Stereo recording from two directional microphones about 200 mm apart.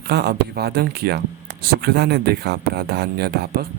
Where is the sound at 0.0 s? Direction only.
55° right (ahead or behind).